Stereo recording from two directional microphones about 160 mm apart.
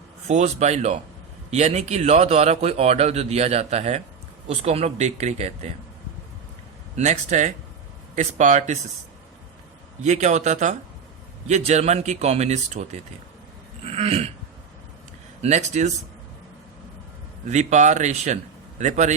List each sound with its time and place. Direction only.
0.3 s a man's voice: 45° right (ahead or behind)
6.9 s speech: 50° right (ahead or behind)
10.0 s a man's voice: 45° right (ahead or behind)
15.4 s speech: 45° right (ahead or behind)
17.4 s speech: 45° right (ahead or behind)